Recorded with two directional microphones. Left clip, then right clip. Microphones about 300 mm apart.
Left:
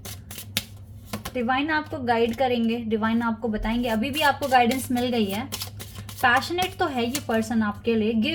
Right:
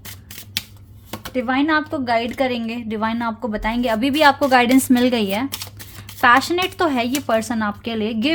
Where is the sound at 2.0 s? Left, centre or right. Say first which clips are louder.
Left 1 dB; right.